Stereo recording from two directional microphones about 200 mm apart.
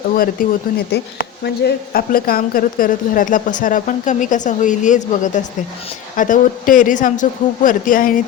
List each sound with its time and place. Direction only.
0.4 s speech: 45° left (ahead or behind)
0.9 s a woman's voice: 55° left (ahead or behind)